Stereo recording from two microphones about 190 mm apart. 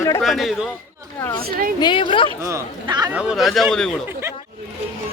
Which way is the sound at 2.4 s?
20° right (ahead or behind).